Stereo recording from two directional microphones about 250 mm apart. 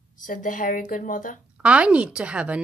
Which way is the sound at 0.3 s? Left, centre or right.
Left.